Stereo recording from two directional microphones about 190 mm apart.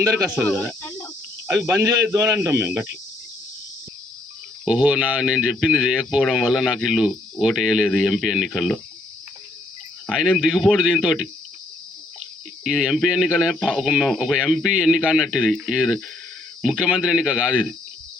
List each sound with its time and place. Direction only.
0.8 s cricket: 10° left (ahead or behind)
1.5 s speech: 15° right (ahead or behind)
4.6 s speech: 5° right (ahead or behind)
10.1 s speech: 5° right (ahead or behind)
12.6 s speech: 5° right (ahead or behind)